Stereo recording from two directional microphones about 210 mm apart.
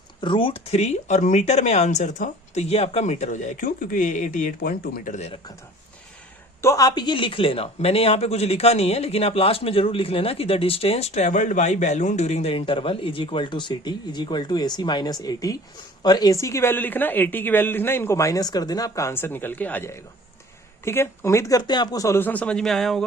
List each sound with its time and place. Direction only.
0.2 s speech: 25° left (ahead or behind)
6.6 s a woman's voice: 15° left (ahead or behind)